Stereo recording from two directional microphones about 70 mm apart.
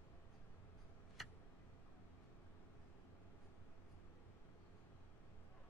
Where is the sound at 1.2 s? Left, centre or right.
Centre.